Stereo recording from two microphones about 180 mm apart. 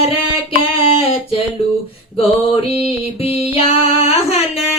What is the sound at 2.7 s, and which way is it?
Music, 35° left (ahead or behind).